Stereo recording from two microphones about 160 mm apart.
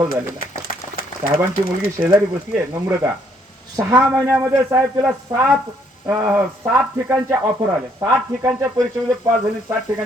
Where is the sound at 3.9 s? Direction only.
15° right (ahead or behind).